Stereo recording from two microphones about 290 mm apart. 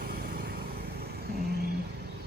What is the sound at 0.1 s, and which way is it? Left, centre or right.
Vehicle, right.